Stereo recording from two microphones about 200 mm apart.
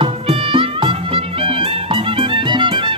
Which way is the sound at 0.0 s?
25° right (ahead or behind).